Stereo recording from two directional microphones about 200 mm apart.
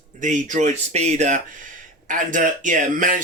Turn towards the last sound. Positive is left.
turn(degrees=-40)  # may be behind; listen again after turning